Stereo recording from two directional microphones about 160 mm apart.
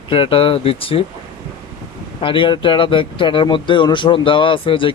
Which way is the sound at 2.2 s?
30° left (ahead or behind).